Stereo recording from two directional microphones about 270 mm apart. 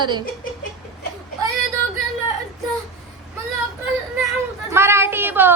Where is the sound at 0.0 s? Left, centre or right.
Centre.